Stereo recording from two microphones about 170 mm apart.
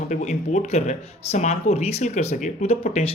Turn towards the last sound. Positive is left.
turn(degrees=40)  # may be behind; listen again after turning